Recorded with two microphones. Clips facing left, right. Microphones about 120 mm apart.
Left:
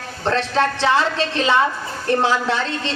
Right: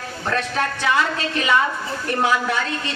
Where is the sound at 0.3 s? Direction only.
30° left (ahead or behind).